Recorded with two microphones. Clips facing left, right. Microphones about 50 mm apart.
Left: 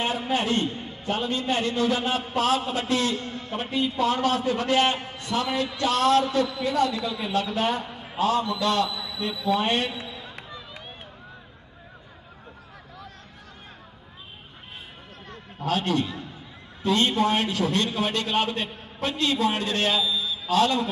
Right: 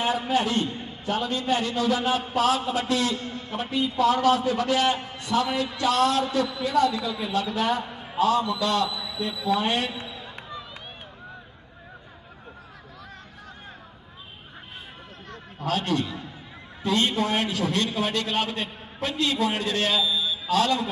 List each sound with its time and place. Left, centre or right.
0.0 s a man's voice: left
15.6 s a man's voice: left